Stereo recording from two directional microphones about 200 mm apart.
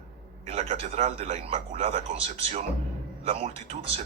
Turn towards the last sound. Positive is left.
turn(degrees=-30)  # may be behind; listen again after turning